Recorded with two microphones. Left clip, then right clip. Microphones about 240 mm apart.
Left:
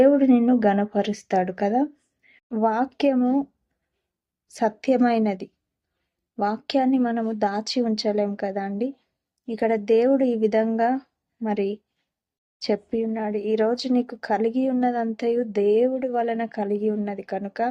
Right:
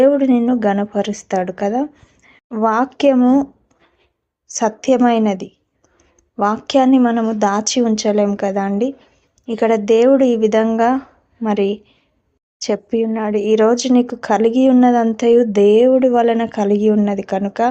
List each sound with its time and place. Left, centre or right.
0.0 s speech: centre
4.5 s speech: centre